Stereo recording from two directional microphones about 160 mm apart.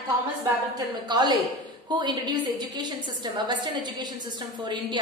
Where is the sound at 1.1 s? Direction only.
30° right (ahead or behind).